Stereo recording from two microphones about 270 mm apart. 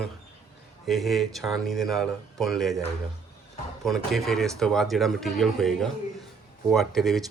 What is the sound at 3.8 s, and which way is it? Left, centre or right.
Speech, centre.